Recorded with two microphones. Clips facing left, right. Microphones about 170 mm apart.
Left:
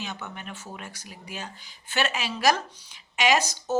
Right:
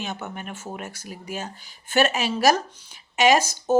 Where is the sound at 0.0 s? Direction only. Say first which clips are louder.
Right 4 dB; 45° right (ahead or behind).